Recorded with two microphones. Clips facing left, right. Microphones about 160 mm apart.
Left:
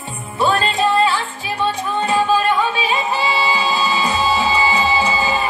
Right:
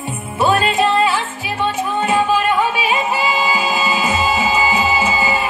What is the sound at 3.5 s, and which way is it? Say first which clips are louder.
Music: even; 20° right (ahead or behind).